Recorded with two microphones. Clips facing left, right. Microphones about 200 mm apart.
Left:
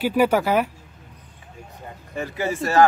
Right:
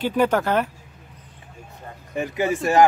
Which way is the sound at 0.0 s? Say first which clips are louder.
Left 1 dB; 10° left (ahead or behind).